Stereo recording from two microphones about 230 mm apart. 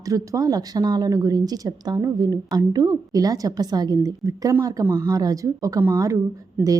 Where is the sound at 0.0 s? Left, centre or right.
Centre.